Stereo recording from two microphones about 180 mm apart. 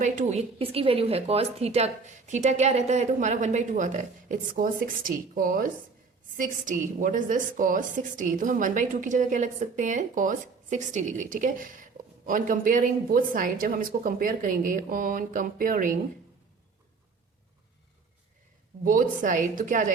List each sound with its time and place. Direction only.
0.0 s a woman's voice: 40° right (ahead or behind)
18.9 s a woman's voice: 45° right (ahead or behind)